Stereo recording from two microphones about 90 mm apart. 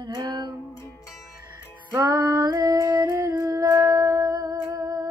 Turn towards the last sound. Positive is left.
turn(degrees=-45)  # may be behind; listen again after turning